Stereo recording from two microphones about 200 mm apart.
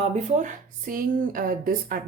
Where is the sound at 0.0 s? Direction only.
35° right (ahead or behind).